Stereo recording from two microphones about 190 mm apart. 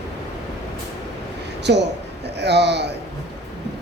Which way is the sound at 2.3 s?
60° right (ahead or behind).